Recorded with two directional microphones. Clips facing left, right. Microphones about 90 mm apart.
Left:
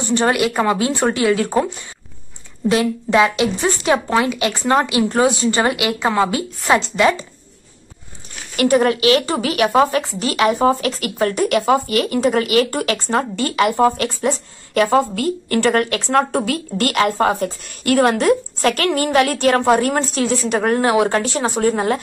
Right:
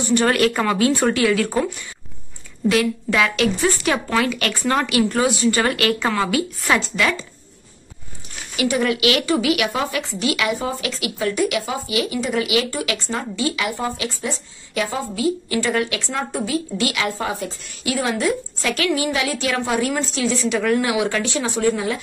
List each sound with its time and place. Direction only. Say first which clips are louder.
0.0 s speech: left 1 dB; 30° left (ahead or behind)
0.3 s a woman's voice: left 1 dB; 15° left (ahead or behind)
8.5 s speech: left 5 dB; 50° left (ahead or behind)